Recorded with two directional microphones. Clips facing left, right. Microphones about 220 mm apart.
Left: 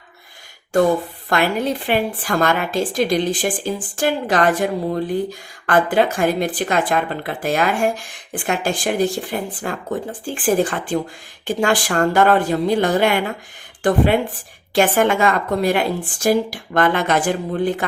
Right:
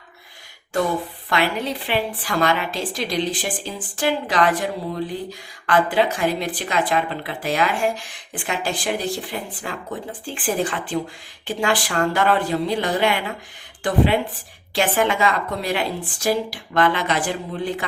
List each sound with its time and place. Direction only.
1.3 s a woman's voice: 45° left (ahead or behind)